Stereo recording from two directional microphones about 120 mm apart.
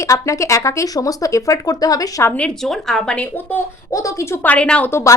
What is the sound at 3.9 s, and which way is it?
A woman's voice, 25° left (ahead or behind).